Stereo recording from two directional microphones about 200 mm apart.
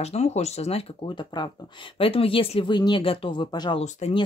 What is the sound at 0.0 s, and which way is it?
Speech, 35° left (ahead or behind).